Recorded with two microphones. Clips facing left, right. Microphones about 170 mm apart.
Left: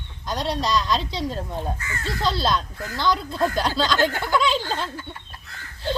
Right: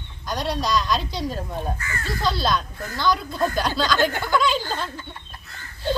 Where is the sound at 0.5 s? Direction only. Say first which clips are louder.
Even; centre (ahead or behind).